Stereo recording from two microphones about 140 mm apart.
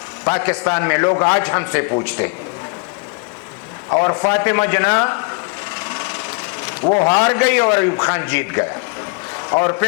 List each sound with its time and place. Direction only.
0.3 s a man's voice: 10° left (ahead or behind)
3.9 s a man's voice: 15° left (ahead or behind)
5.9 s sewing machine: 20° left (ahead or behind)
6.9 s a man's voice: 15° left (ahead or behind)
9.5 s speech: 25° left (ahead or behind)